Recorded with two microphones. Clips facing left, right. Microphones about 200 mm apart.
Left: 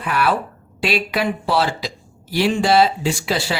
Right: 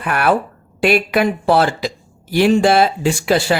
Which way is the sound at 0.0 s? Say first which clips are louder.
Right 3 dB; 55° right (ahead or behind).